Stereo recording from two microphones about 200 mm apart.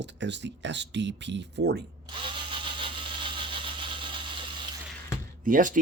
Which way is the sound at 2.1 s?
25° right (ahead or behind).